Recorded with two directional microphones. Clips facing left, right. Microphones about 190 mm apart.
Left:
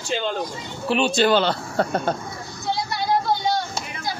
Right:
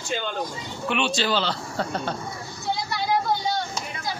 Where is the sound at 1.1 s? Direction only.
55° left (ahead or behind).